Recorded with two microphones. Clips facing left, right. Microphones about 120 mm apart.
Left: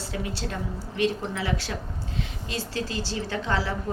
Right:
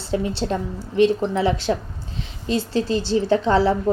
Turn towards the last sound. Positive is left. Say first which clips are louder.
# right 11 dB
turn(degrees=-30)  # may be behind; listen again after turning